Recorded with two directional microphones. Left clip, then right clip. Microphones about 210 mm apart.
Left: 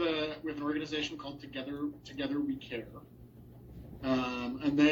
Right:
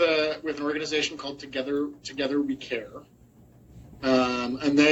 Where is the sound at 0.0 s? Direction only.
60° right (ahead or behind).